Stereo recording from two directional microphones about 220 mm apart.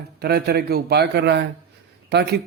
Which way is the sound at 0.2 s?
45° right (ahead or behind).